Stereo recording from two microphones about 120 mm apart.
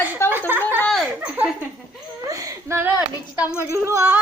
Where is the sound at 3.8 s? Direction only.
20° right (ahead or behind).